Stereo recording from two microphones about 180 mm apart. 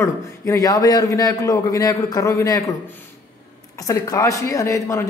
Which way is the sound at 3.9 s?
20° left (ahead or behind).